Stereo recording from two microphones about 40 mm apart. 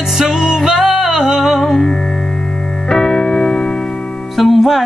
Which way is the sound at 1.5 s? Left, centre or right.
Centre.